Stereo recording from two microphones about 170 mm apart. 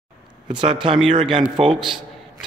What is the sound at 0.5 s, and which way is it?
Speech, 30° right (ahead or behind).